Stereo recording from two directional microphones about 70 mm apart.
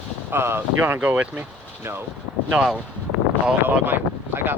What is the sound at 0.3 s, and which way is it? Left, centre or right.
Speech, right.